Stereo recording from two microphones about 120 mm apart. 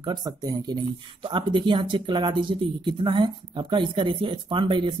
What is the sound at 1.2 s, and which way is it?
Speech, 45° right (ahead or behind).